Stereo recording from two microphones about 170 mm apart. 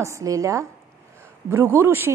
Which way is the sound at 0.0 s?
20° right (ahead or behind).